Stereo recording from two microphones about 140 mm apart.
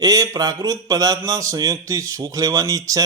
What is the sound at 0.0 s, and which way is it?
A man's voice, 25° right (ahead or behind).